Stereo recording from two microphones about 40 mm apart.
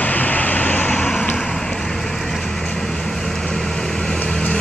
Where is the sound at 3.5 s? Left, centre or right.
Centre.